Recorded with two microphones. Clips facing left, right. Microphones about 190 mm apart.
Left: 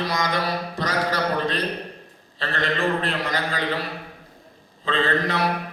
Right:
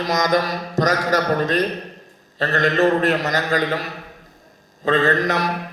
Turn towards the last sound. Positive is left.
turn(degrees=-45)  # may be behind; listen again after turning